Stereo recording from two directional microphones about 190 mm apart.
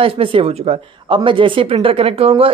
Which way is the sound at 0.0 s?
30° right (ahead or behind).